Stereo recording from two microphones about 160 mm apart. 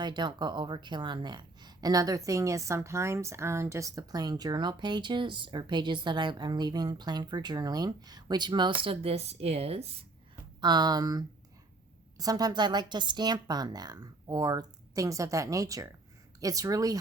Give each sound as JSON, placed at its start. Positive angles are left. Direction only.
{"t": 0.0, "sound": "a woman's voice", "side_deg": -30}
{"t": 10.6, "sound": "a woman's voice", "side_deg": -25}